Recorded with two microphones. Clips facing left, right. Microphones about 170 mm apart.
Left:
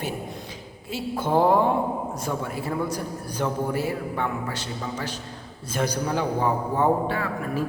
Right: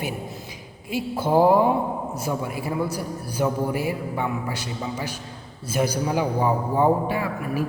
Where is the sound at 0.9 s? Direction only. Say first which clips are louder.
Right 2 dB; 10° right (ahead or behind).